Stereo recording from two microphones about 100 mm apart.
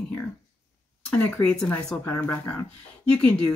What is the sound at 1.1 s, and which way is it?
Speech, 15° left (ahead or behind).